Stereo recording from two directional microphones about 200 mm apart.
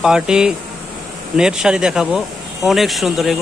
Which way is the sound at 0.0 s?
5° right (ahead or behind).